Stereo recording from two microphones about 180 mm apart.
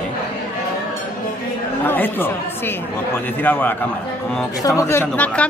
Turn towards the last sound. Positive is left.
turn(degrees=5)  # may be behind; listen again after turning